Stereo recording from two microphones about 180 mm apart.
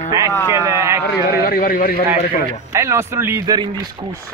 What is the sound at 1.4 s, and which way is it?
Speech, 50° left (ahead or behind).